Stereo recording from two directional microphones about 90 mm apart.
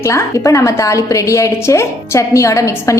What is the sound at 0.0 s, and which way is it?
A woman's voice, 35° left (ahead or behind).